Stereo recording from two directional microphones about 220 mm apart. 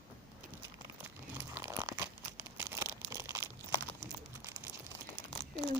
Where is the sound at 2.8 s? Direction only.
15° right (ahead or behind).